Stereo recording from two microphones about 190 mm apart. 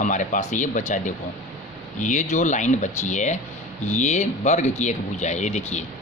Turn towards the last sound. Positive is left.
turn(degrees=35)  # may be behind; listen again after turning